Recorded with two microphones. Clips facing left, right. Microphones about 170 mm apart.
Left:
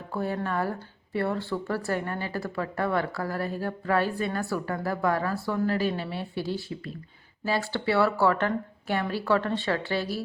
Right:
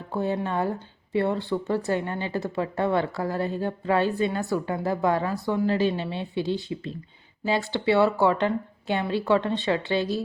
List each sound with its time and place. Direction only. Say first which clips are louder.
0.1 s speech: right 3 dB; 20° right (ahead or behind)